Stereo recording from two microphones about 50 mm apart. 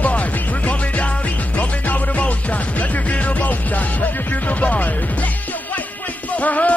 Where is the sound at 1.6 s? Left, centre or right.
Left.